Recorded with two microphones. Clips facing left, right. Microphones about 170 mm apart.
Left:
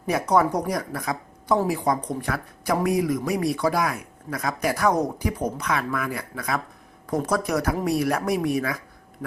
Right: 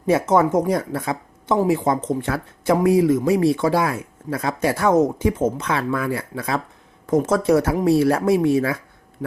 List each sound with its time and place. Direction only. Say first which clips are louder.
0.0 s speech: right 4 dB; 25° right (ahead or behind)